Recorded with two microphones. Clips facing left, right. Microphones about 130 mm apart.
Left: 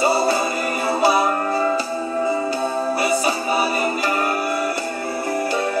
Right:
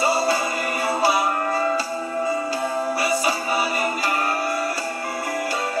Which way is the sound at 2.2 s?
25° left (ahead or behind).